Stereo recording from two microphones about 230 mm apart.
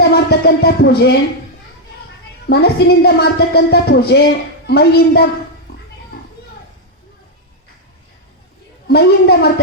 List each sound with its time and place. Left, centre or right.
0.0 s music: left
2.5 s speech: left
8.9 s speech: left